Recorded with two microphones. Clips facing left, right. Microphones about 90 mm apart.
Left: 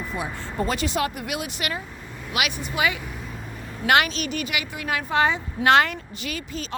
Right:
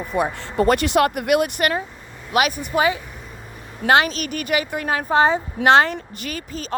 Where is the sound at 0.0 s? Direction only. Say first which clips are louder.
Right 8 dB; 60° right (ahead or behind).